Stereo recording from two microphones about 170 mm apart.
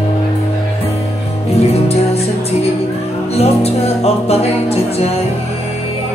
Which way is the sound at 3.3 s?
35° left (ahead or behind).